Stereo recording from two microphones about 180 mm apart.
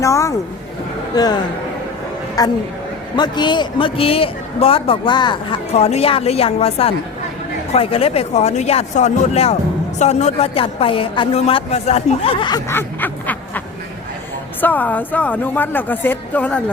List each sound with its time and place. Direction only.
0.0 s a man's voice: 15° left (ahead or behind)
2.4 s a man's voice: 20° left (ahead or behind)
5.7 s a woman's voice: 35° left (ahead or behind); by 13.6 s 10° left (ahead or behind)
14.6 s speech: 10° left (ahead or behind)